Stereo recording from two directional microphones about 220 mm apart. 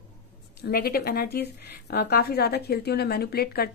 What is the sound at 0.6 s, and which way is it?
Speech, 45° left (ahead or behind).